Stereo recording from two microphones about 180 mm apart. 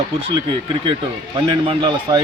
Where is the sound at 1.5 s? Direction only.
25° right (ahead or behind).